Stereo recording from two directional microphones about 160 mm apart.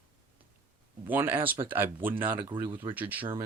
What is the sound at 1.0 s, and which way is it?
Speech, 10° right (ahead or behind).